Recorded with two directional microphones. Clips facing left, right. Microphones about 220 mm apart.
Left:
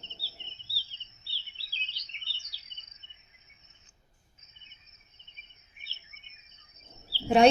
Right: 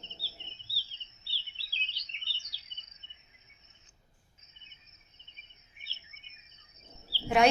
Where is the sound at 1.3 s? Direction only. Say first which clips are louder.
Right 1 dB; 45° left (ahead or behind).